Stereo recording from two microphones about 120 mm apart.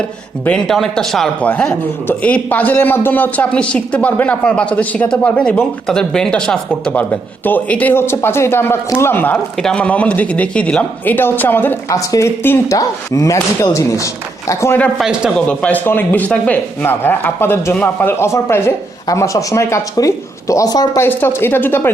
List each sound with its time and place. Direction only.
0.4 s a man's voice: 5° left (ahead or behind)
11.9 s speech: 30° left (ahead or behind)
14.9 s speech: 5° right (ahead or behind)
15.4 s a man's voice: 10° left (ahead or behind); by 21.0 s 30° left (ahead or behind)
21.0 s a man's voice: 20° left (ahead or behind)